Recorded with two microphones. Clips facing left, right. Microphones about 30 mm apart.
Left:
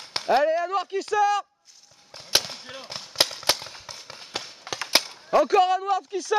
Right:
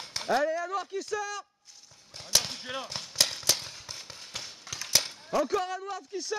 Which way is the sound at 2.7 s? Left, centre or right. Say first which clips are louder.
Right 4 dB; centre.